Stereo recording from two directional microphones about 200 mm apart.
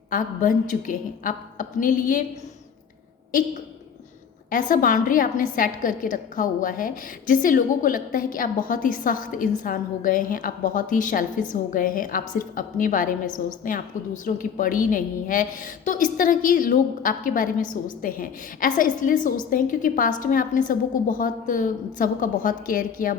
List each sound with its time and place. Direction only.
0.1 s a woman's voice: 40° left (ahead or behind)
4.4 s a woman's voice: 45° left (ahead or behind)